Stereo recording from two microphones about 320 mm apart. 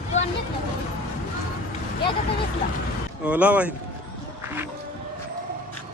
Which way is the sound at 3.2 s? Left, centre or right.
Centre.